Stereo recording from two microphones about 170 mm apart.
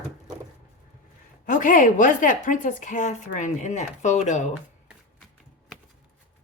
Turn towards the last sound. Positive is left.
turn(degrees=45)  # may be behind; listen again after turning